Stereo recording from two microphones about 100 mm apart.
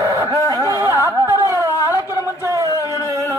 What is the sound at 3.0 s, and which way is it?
Music, 30° right (ahead or behind).